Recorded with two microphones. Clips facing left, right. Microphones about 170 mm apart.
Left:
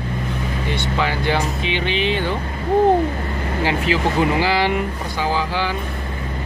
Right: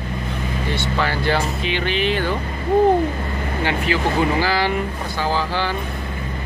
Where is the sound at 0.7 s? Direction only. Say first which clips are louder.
Left 1 dB; 15° left (ahead or behind).